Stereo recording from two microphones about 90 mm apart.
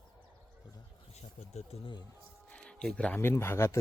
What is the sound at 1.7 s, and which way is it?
Speech, 90° left.